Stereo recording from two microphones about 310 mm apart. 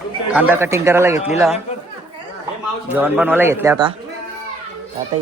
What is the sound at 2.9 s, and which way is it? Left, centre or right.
Speech, centre.